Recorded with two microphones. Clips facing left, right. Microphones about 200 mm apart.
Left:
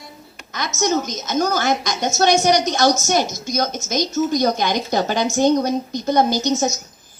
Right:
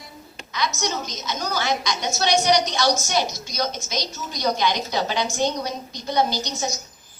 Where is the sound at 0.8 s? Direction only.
45° left (ahead or behind).